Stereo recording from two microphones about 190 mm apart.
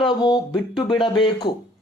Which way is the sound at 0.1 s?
20° left (ahead or behind).